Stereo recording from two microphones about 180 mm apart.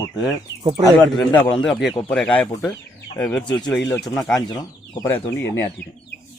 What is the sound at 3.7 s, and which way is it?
Speech, 5° left (ahead or behind).